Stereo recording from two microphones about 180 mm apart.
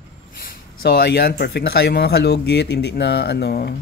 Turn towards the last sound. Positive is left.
turn(degrees=65)  # may be behind; listen again after turning